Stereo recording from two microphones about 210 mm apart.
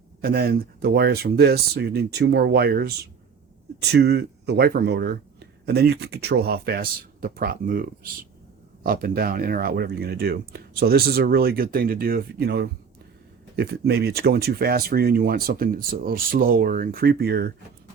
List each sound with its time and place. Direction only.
0.2 s speech: 45° right (ahead or behind)